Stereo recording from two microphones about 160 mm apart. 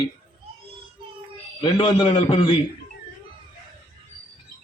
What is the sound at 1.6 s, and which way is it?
Speech, 35° left (ahead or behind).